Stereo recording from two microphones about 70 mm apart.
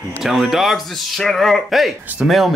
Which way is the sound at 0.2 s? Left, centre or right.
Centre.